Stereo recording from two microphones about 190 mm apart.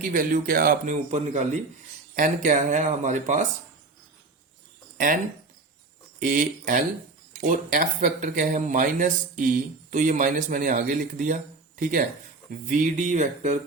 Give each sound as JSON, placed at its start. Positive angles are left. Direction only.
{"t": 0.0, "sound": "speech", "side_deg": -45}
{"t": 4.9, "sound": "speech", "side_deg": -45}